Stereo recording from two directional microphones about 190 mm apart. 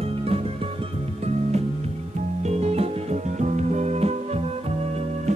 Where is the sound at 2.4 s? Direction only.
35° right (ahead or behind).